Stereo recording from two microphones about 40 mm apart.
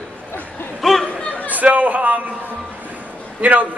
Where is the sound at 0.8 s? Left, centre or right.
Centre.